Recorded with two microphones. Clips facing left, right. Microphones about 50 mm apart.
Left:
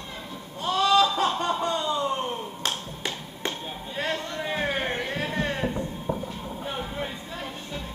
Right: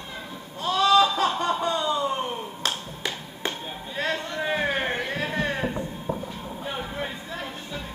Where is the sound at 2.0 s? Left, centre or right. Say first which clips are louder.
Right 1 dB; centre.